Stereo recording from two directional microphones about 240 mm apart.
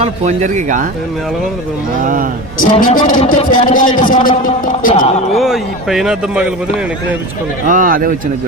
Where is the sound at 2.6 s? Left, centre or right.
Left.